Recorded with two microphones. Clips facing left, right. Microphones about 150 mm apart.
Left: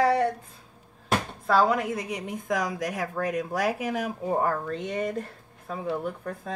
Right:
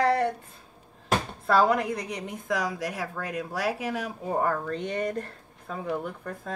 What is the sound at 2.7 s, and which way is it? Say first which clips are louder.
Speech: left 2 dB; 20° left (ahead or behind).